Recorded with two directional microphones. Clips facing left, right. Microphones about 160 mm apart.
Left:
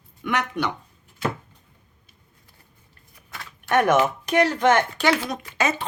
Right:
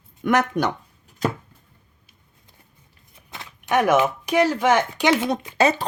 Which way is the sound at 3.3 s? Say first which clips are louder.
Even; 20° right (ahead or behind).